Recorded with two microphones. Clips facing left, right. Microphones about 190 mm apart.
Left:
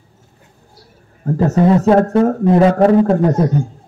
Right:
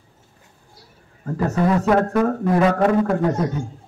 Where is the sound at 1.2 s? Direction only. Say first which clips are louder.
Left 7 dB; 35° left (ahead or behind).